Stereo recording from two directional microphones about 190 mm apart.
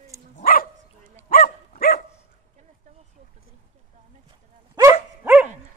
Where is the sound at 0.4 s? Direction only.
50° left (ahead or behind).